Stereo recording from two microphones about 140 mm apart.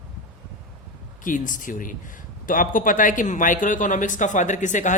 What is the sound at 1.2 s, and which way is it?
Speech, 70° left (ahead or behind).